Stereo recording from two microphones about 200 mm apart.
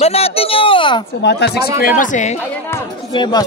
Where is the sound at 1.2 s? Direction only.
60° left (ahead or behind); by 2.4 s 35° left (ahead or behind).